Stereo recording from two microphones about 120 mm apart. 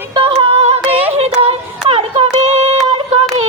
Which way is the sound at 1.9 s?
60° right (ahead or behind).